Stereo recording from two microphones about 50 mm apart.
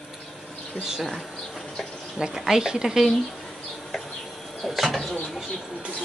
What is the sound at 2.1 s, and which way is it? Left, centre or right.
Speech, centre.